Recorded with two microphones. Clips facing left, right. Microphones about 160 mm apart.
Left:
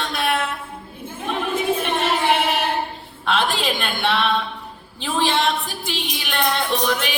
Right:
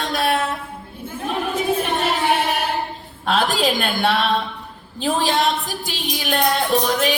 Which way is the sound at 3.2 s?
40° right (ahead or behind).